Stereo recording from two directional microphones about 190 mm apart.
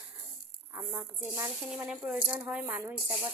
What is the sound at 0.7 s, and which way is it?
Speech, 15° right (ahead or behind).